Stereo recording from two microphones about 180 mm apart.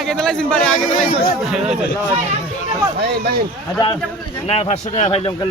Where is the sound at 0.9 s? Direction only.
45° left (ahead or behind).